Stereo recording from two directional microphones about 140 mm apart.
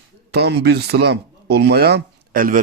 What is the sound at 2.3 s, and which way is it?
Speech, 80° right.